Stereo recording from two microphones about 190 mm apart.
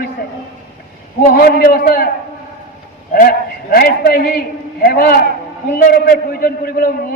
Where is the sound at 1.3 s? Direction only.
50° left (ahead or behind).